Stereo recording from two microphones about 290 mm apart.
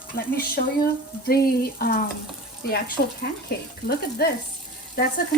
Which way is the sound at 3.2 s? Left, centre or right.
Left.